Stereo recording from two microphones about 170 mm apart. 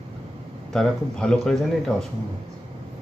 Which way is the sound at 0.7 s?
5° left (ahead or behind).